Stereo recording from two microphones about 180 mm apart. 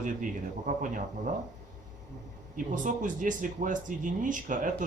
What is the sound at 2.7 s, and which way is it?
Speech, 45° right (ahead or behind).